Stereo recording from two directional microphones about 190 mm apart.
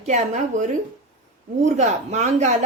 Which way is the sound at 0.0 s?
40° right (ahead or behind).